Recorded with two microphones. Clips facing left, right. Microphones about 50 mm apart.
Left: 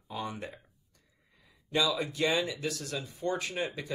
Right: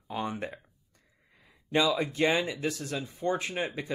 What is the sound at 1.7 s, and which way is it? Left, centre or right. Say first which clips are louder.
Speech: right 3 dB; right.